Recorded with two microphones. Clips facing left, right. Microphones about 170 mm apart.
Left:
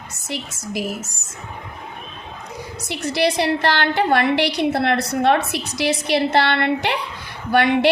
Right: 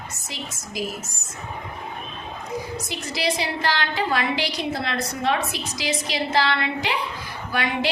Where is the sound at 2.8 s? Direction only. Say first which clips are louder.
Left 9 dB; 70° left (ahead or behind).